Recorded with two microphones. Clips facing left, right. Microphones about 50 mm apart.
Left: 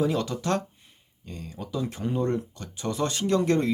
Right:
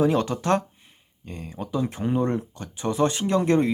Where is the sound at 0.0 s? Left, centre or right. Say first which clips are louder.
Right 4 dB; right.